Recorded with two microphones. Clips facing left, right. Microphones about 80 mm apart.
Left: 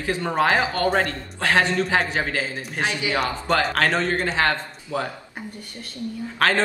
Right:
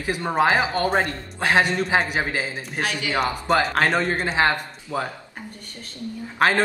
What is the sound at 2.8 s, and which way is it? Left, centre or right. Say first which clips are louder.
Speech: left 1 dB; left.